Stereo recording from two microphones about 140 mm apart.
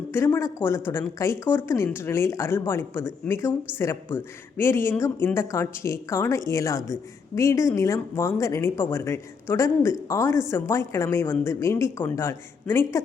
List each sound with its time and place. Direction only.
0.1 s speech: 20° left (ahead or behind)